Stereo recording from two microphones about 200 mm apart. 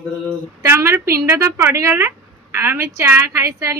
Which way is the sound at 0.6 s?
10° right (ahead or behind).